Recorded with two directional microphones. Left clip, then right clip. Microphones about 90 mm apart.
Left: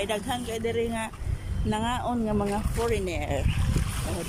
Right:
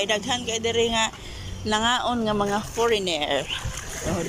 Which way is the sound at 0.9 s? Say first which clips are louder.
Right 9 dB; 15° left (ahead or behind).